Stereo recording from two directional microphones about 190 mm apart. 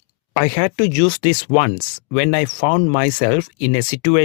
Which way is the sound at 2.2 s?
45° left (ahead or behind).